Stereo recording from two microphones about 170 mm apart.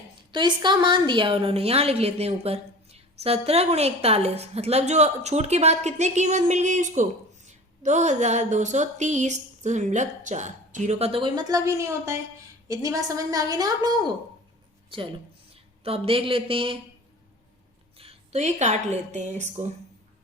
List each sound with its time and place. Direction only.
0.3 s a woman's voice: 25° right (ahead or behind)
17.9 s a woman's voice: 35° right (ahead or behind)